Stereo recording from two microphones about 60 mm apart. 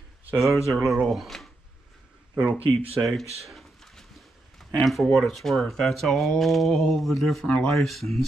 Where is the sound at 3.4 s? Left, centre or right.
Centre.